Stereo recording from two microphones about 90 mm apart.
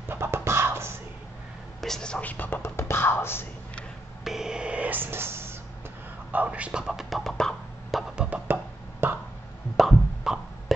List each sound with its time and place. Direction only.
0.1 s music: 30° right (ahead or behind)
1.8 s speech: 5° left (ahead or behind); by 3.4 s 25° left (ahead or behind)
4.2 s a sound: 5° right (ahead or behind); by 5.6 s 25° right (ahead or behind)
6.3 s a sound: 15° right (ahead or behind); by 8.0 s 5° left (ahead or behind)
8.2 s music: 15° right (ahead or behind)
9.0 s burping: 25° right (ahead or behind)
9.8 s plop: 5° right (ahead or behind)